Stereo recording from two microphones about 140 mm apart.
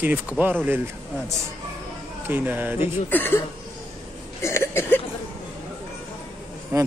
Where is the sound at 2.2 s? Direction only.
15° right (ahead or behind).